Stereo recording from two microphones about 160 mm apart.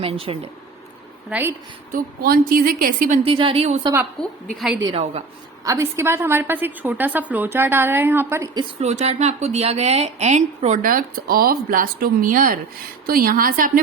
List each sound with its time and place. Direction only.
0.0 s speech: 35° right (ahead or behind)
1.3 s a woman's voice: 10° right (ahead or behind)
1.9 s a woman's voice: 65° right (ahead or behind)
3.2 s speech: 35° right (ahead or behind)
4.2 s a woman's voice: 5° left (ahead or behind)
4.8 s a woman's voice: 30° right (ahead or behind)
5.6 s a woman's voice: 20° right (ahead or behind)
8.8 s a woman's voice: 45° right (ahead or behind); by 13.8 s 60° right (ahead or behind)